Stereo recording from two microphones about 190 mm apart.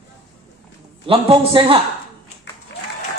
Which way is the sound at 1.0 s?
30° right (ahead or behind).